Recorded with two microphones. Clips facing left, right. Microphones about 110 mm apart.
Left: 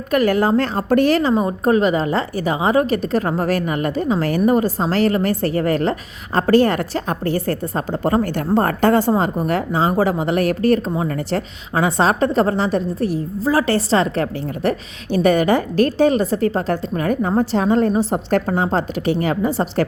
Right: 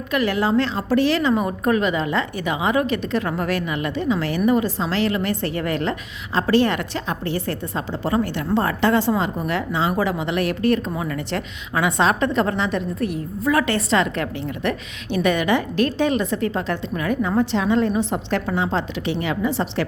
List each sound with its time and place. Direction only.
0.1 s a woman's voice: 45° left (ahead or behind)
1.3 s a woman's voice: 25° left (ahead or behind); by 19.8 s 40° left (ahead or behind)